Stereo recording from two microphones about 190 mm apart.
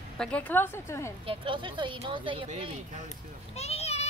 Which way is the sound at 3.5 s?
35° left (ahead or behind).